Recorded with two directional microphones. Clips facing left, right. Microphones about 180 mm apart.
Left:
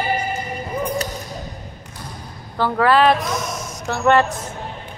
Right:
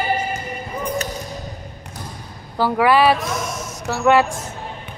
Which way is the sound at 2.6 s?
10° right (ahead or behind).